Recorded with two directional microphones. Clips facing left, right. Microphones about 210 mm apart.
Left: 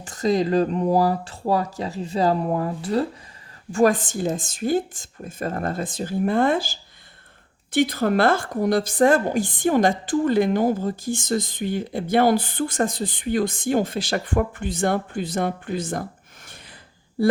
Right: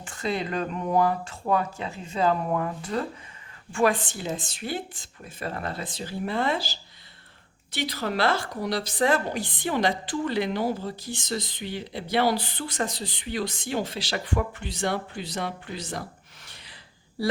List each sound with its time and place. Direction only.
0.0 s a woman's voice: 40° left (ahead or behind)